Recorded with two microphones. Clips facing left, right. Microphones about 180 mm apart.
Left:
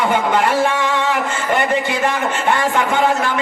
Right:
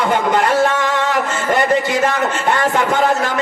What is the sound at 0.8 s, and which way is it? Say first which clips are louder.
A man's voice: right 1 dB; 40° right (ahead or behind).